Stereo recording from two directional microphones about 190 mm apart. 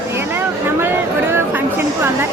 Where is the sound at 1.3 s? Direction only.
10° right (ahead or behind).